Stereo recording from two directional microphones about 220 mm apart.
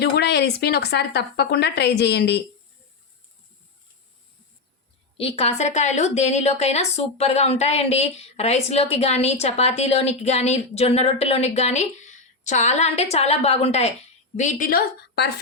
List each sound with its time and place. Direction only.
0.0 s a woman's voice: 50° left (ahead or behind)
5.1 s a woman's voice: 25° left (ahead or behind); by 15.3 s 45° left (ahead or behind)